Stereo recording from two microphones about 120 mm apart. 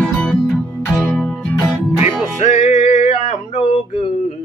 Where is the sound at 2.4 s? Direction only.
65° left (ahead or behind).